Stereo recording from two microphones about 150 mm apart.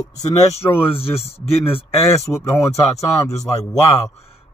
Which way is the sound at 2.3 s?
15° left (ahead or behind).